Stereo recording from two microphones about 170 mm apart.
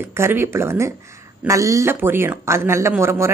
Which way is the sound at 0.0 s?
15° right (ahead or behind).